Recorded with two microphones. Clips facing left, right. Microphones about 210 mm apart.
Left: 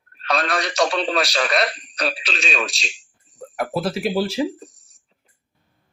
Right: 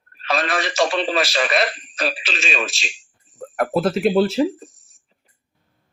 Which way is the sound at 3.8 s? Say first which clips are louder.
Right 6 dB; 10° left (ahead or behind).